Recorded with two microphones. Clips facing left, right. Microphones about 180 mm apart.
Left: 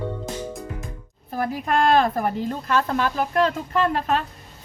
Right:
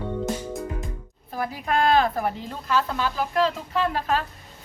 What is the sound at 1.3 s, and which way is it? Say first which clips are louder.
A woman's voice: left 2 dB; 50° left (ahead or behind).